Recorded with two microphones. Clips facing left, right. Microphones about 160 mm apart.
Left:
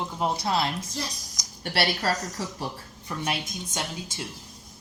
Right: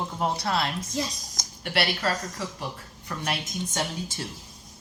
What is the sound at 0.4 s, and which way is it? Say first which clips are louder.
Speech: left 3 dB; 25° left (ahead or behind).